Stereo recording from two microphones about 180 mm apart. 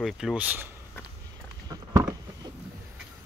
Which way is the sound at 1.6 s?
20° right (ahead or behind).